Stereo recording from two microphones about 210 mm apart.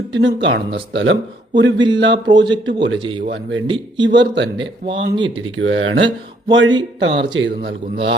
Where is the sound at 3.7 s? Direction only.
25° right (ahead or behind).